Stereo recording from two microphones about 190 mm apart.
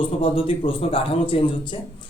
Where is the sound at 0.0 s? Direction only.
30° left (ahead or behind).